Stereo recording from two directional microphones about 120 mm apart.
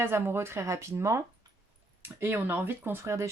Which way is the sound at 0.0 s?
20° right (ahead or behind).